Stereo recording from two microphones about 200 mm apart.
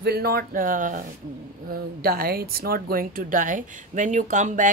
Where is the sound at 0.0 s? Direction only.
50° right (ahead or behind).